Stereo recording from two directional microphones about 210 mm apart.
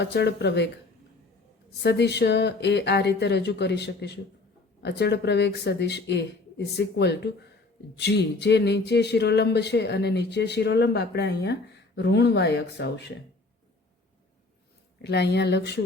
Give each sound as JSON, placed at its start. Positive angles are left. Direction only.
{"t": 0.0, "sound": "speech", "side_deg": 55}
{"t": 1.8, "sound": "speech", "side_deg": 55}
{"t": 15.0, "sound": "speech", "side_deg": 55}